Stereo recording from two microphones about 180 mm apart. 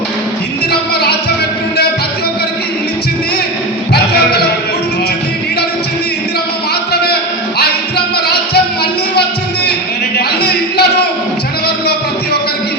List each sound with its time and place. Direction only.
3.9 s music: 60° left (ahead or behind)
7.6 s music: 60° left (ahead or behind)
10.2 s a sound: 65° left (ahead or behind)